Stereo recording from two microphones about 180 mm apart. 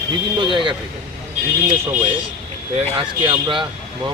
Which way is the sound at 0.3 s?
25° right (ahead or behind).